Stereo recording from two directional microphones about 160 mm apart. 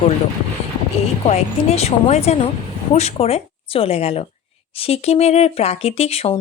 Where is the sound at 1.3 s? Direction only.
45° left (ahead or behind).